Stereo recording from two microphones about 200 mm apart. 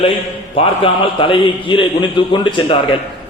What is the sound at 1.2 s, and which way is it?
A man's voice, 25° left (ahead or behind).